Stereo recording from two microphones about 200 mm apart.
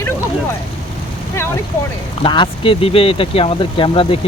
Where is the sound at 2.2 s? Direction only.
25° left (ahead or behind).